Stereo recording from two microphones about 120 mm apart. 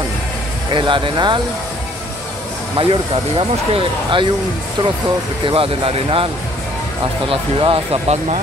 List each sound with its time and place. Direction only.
0.7 s speech: 45° right (ahead or behind)
2.8 s speech: 45° right (ahead or behind)
5.4 s speech: 50° right (ahead or behind)
7.2 s speech: 50° right (ahead or behind)